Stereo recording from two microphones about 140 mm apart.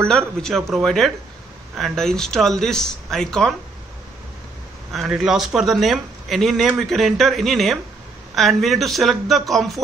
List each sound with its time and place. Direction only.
0.1 s speech: 5° left (ahead or behind)
4.9 s speech: 5° right (ahead or behind)